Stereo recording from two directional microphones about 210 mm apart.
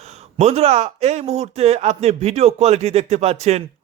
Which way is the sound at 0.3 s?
30° right (ahead or behind).